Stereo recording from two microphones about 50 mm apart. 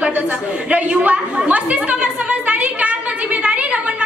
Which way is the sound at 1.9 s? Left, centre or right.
Right.